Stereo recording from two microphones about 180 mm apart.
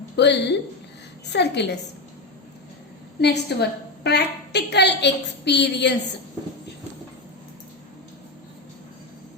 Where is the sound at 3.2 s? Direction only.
70° left (ahead or behind).